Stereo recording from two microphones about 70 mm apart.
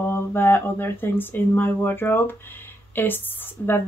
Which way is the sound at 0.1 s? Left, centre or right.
Left.